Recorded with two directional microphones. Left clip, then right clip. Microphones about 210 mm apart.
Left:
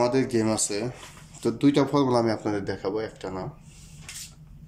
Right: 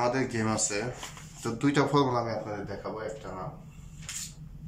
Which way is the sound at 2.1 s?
35° left (ahead or behind).